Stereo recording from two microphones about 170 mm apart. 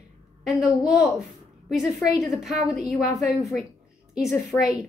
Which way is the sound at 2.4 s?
Centre (ahead or behind).